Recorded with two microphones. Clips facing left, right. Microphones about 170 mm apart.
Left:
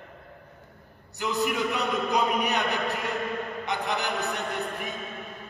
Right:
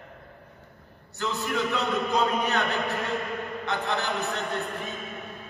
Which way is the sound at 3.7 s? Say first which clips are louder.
Right 1 dB; 15° left (ahead or behind).